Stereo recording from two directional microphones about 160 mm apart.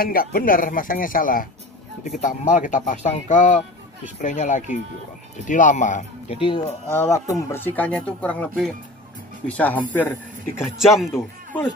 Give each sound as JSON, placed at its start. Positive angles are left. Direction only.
{"t": 0.0, "sound": "speech", "side_deg": 65}
{"t": 6.9, "sound": "speech", "side_deg": 15}
{"t": 10.8, "sound": "speech", "side_deg": 0}
{"t": 11.1, "sound": "a man's voice", "side_deg": 15}